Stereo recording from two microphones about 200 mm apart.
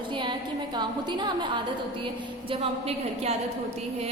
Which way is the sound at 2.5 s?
30° right (ahead or behind).